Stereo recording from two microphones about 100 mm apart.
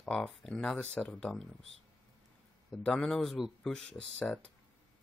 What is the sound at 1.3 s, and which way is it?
Speech, centre (ahead or behind).